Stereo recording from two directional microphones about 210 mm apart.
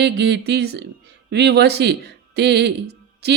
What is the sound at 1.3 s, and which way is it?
A man's voice, 50° right (ahead or behind).